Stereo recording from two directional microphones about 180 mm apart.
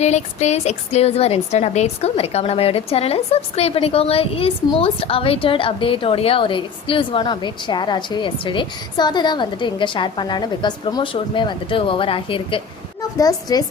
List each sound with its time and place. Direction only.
0.0 s a woman's voice: 40° left (ahead or behind); by 13.7 s 20° left (ahead or behind)